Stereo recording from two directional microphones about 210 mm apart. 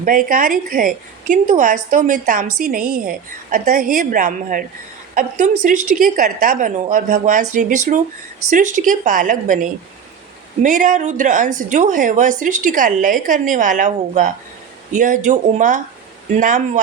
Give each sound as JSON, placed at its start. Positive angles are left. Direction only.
{"t": 0.3, "sound": "a woman's voice", "side_deg": -40}